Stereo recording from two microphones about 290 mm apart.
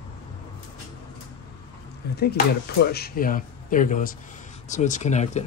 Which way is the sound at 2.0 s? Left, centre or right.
Left.